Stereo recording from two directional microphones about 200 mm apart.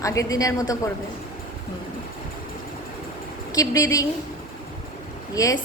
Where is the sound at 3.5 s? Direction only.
15° left (ahead or behind).